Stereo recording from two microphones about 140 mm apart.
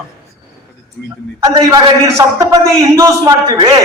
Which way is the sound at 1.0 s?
5° left (ahead or behind).